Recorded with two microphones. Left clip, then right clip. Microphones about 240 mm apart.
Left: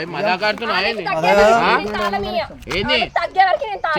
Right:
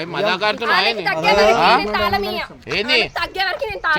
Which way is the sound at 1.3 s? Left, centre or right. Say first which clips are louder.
Left 1 dB; centre.